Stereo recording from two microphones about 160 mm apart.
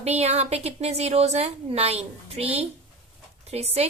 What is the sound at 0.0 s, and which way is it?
A woman's voice, 40° right (ahead or behind).